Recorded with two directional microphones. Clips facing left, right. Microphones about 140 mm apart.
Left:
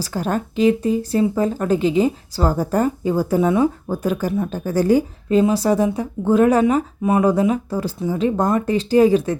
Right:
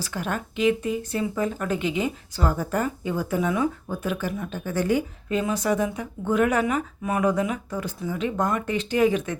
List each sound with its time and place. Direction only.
0.0 s speech: 35° left (ahead or behind)